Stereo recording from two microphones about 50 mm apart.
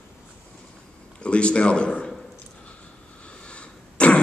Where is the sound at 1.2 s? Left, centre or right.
Left.